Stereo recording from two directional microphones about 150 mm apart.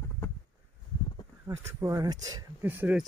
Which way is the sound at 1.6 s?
20° right (ahead or behind).